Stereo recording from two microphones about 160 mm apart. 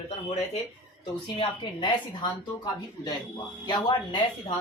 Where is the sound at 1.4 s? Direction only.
30° left (ahead or behind).